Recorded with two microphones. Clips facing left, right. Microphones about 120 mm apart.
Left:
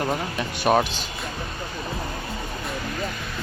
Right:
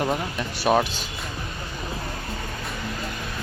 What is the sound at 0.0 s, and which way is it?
Speech, 5° right (ahead or behind).